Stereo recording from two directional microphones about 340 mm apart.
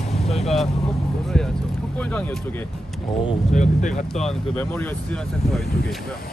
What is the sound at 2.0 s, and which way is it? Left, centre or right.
Speech, centre.